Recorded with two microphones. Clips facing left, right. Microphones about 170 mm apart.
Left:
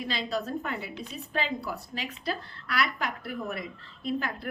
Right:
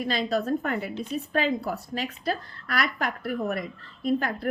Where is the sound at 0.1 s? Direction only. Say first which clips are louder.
Right 6 dB; 50° right (ahead or behind).